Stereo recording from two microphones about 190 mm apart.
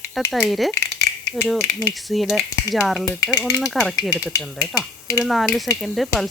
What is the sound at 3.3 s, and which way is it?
Speech, 20° left (ahead or behind).